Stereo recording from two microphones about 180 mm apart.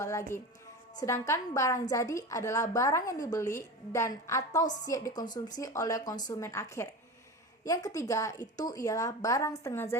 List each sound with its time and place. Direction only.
0.0 s a woman's voice: 15° left (ahead or behind)